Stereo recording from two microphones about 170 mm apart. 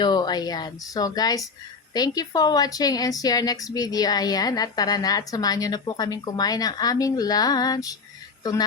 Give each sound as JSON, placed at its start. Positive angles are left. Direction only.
{"t": 0.0, "sound": "a woman's voice", "side_deg": 25}